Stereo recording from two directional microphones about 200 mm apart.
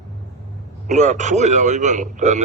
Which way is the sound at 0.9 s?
35° right (ahead or behind).